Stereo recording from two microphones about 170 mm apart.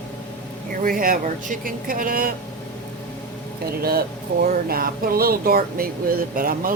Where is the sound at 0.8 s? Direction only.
55° right (ahead or behind).